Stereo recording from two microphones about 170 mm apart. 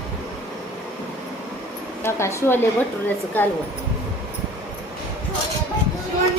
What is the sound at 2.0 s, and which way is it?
Speech, 15° left (ahead or behind).